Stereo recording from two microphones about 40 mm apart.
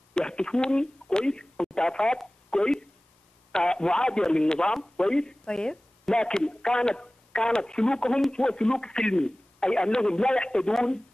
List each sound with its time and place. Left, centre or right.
0.1 s a woman's voice: left